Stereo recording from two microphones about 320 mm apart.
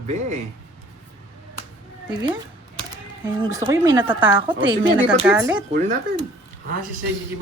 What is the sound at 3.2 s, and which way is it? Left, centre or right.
Speech, centre.